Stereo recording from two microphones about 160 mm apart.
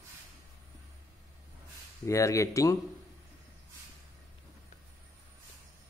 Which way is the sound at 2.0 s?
20° left (ahead or behind).